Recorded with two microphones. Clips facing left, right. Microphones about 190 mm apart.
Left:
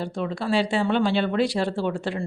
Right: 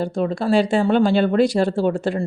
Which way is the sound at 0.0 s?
45° right (ahead or behind).